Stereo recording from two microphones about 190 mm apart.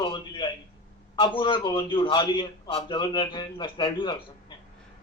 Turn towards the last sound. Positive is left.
turn(degrees=25)  # may be behind; listen again after turning